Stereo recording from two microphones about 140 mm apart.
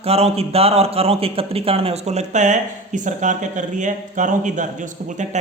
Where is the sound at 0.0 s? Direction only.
45° right (ahead or behind).